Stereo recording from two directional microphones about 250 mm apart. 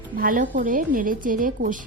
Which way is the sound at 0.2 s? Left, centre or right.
Right.